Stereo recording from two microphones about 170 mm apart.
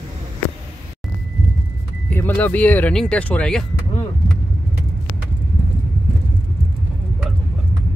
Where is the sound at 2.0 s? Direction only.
10° left (ahead or behind).